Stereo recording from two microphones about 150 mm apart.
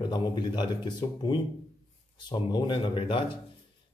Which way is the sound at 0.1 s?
30° left (ahead or behind).